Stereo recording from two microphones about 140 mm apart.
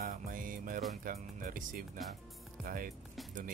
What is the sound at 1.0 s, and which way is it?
Speech, 85° right.